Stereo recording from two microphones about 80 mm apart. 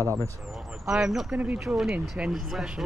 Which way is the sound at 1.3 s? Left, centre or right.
Centre.